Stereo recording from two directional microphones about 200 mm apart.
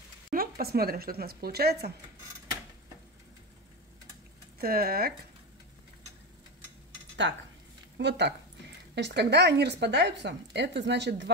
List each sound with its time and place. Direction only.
0.3 s speech: 50° right (ahead or behind)
4.6 s speech: 50° right (ahead or behind)
7.2 s speech: 65° right (ahead or behind)